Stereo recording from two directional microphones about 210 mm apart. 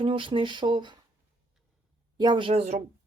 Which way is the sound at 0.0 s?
25° right (ahead or behind).